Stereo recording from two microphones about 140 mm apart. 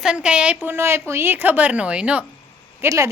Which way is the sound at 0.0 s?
5° right (ahead or behind).